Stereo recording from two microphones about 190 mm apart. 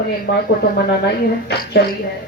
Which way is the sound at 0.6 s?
55° left (ahead or behind).